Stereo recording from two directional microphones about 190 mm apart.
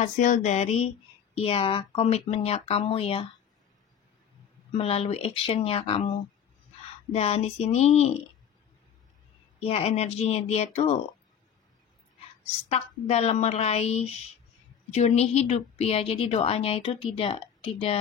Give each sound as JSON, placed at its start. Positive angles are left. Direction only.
{"t": 0.0, "sound": "a woman's voice", "side_deg": 40}
{"t": 4.7, "sound": "a woman's voice", "side_deg": 30}
{"t": 9.6, "sound": "a woman's voice", "side_deg": 35}
{"t": 12.6, "sound": "a woman's voice", "side_deg": 35}